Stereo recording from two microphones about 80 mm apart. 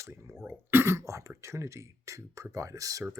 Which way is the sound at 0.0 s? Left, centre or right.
Right.